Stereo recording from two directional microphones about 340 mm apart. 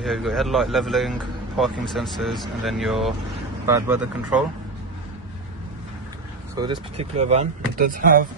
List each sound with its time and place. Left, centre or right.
0.0 s speech: centre
6.5 s speech: centre